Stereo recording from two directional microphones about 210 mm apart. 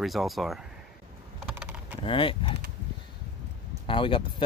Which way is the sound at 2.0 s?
25° left (ahead or behind).